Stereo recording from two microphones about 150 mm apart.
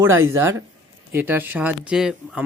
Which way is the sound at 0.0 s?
15° right (ahead or behind).